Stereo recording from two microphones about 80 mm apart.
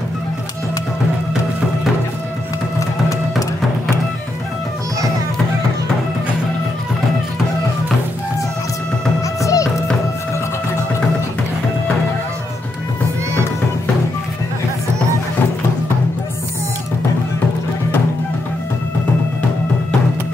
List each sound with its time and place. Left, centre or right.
9.4 s music: left